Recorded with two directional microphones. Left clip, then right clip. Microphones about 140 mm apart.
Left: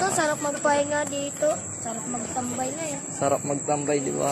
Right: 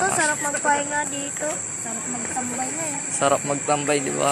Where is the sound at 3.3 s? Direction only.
15° right (ahead or behind).